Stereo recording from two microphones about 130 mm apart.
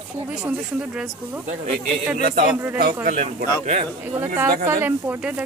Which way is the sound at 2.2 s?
90° right.